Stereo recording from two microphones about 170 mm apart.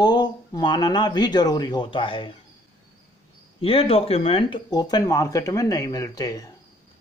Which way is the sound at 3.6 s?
35° left (ahead or behind).